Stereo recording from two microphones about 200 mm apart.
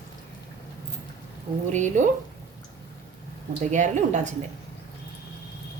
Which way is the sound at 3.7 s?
35° right (ahead or behind).